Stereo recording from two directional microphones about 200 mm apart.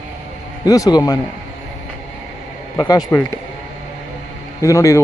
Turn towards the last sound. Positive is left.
turn(degrees=15)  # may be behind; listen again after turning